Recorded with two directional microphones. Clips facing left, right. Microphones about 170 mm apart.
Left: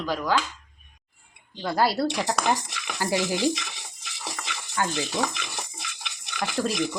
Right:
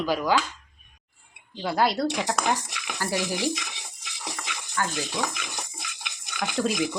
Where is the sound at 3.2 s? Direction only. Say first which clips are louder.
Left 3 dB; 10° right (ahead or behind).